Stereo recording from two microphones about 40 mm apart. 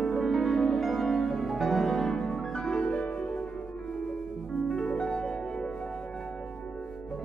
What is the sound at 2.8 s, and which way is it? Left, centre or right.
Music, left.